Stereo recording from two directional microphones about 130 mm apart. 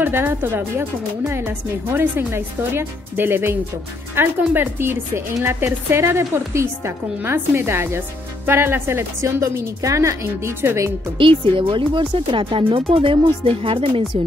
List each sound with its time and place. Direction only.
0.0 s a woman's voice: 15° right (ahead or behind)
11.1 s speech: 40° right (ahead or behind)